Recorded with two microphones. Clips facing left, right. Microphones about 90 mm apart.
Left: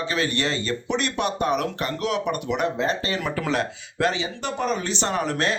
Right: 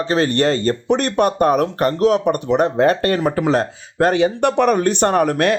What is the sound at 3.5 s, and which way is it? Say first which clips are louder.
Speech: right 7 dB; 40° right (ahead or behind).